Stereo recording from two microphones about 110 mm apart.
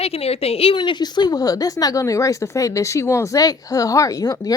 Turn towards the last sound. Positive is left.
turn(degrees=35)  # may be behind; listen again after turning